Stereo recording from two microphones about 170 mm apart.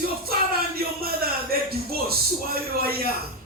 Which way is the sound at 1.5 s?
65° right (ahead or behind).